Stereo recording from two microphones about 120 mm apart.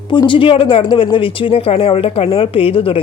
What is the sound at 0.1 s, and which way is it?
A woman's voice, 45° left (ahead or behind).